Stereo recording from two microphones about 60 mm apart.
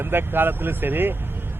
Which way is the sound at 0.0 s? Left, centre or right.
Right.